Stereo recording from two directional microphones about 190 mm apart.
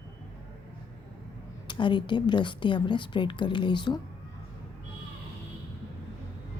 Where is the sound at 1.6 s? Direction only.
25° left (ahead or behind).